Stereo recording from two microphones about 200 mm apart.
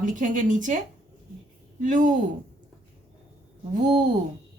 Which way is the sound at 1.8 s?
40° right (ahead or behind).